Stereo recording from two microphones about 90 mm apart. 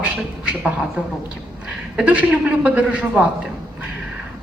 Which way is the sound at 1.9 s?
15° right (ahead or behind).